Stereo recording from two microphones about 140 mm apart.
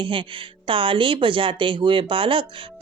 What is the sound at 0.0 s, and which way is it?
Speech, 40° right (ahead or behind).